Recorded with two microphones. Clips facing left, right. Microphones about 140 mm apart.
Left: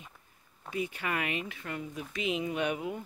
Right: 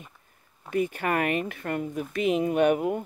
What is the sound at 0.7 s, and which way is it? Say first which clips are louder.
Speech: right 8 dB; 50° right (ahead or behind).